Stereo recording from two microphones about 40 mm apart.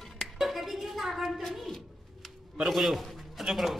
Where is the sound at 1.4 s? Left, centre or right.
Centre.